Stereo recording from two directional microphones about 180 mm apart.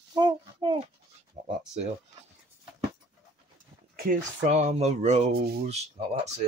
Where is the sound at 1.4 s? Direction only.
45° right (ahead or behind).